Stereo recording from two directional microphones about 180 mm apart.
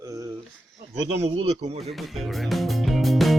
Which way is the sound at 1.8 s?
Centre (ahead or behind).